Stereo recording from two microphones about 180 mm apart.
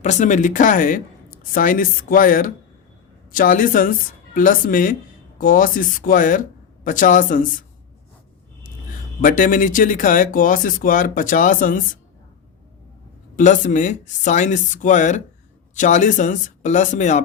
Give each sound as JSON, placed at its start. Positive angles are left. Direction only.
{"t": 0.0, "sound": "speech", "side_deg": 40}
{"t": 9.2, "sound": "speech", "side_deg": 45}
{"t": 13.3, "sound": "speech", "side_deg": 45}